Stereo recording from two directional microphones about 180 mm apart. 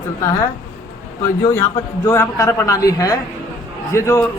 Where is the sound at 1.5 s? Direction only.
15° left (ahead or behind).